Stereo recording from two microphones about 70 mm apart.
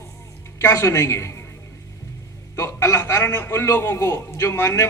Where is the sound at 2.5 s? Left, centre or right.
Left.